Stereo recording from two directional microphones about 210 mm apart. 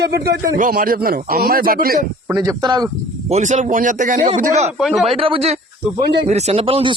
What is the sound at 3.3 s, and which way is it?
Speech, 35° right (ahead or behind).